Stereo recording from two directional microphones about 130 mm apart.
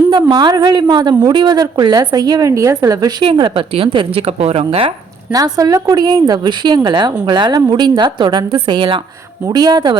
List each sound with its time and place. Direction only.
0.1 s a woman's voice: 35° right (ahead or behind); by 4.9 s 50° right (ahead or behind)
5.3 s a woman's voice: 30° right (ahead or behind)